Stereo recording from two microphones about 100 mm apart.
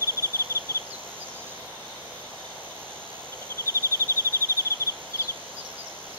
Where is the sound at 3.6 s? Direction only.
30° left (ahead or behind).